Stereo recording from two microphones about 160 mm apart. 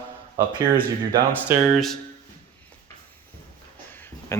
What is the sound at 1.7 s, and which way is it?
Speech, centre (ahead or behind).